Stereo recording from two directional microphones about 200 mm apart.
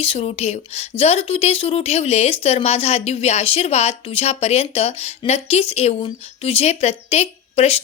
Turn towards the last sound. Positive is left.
turn(degrees=30)  # may be behind; listen again after turning